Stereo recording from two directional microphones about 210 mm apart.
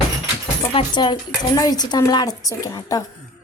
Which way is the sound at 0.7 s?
20° left (ahead or behind).